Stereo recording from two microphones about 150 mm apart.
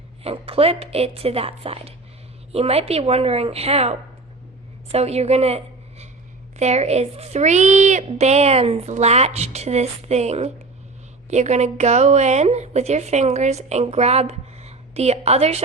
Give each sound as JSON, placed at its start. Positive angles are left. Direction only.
{"t": 0.2, "sound": "a woman's voice", "side_deg": -40}